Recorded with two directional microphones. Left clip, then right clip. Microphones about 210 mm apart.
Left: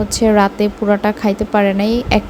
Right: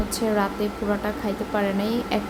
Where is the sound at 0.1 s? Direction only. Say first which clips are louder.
Left 11 dB; 35° left (ahead or behind).